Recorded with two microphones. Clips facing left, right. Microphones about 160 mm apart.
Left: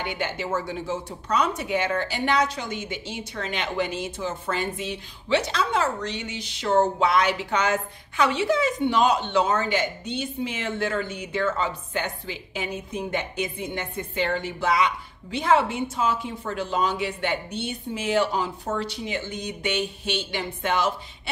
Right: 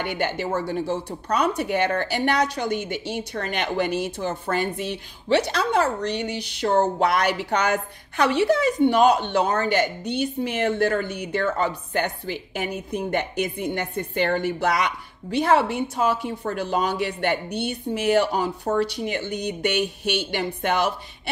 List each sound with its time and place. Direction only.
0.0 s a woman's voice: 60° right (ahead or behind)
6.6 s a sound: 40° right (ahead or behind)
7.1 s a woman's voice: 65° right (ahead or behind)